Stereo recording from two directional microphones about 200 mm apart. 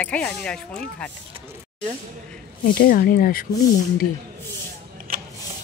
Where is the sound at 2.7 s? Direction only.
45° left (ahead or behind).